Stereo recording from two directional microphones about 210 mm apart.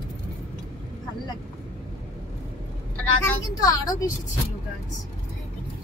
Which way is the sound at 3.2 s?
15° left (ahead or behind).